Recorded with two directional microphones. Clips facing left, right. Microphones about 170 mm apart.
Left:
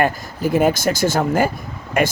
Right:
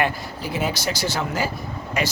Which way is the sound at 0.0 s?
50° left (ahead or behind).